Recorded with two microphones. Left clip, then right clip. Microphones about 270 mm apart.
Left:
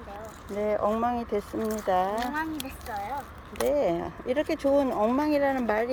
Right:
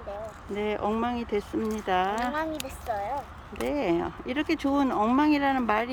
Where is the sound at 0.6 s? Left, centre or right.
Centre.